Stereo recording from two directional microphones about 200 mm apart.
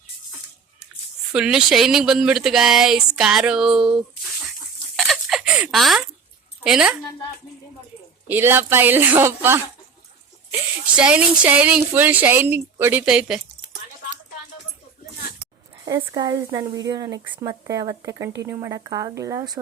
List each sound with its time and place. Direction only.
1.3 s speech: 5° right (ahead or behind)
4.9 s a sound: centre (ahead or behind)
6.7 s speech: centre (ahead or behind)
8.3 s a woman's voice: 10° right (ahead or behind)
10.9 s a woman's voice: 5° right (ahead or behind)
15.8 s a woman's voice: 15° right (ahead or behind)